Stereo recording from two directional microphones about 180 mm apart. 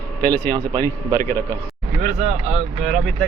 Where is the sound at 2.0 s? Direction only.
40° right (ahead or behind).